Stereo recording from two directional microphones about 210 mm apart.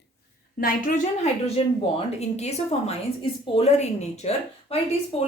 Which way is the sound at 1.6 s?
25° left (ahead or behind).